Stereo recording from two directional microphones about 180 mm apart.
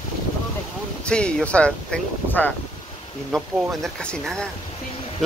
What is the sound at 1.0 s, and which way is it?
Speech, 5° left (ahead or behind).